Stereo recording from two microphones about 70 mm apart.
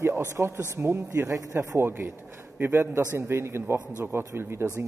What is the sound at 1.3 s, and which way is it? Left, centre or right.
Speech, right.